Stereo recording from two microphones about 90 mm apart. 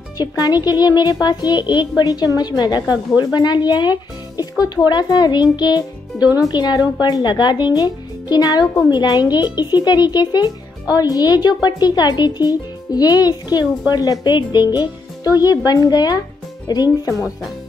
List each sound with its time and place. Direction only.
0.2 s a child's voice: 50° left (ahead or behind)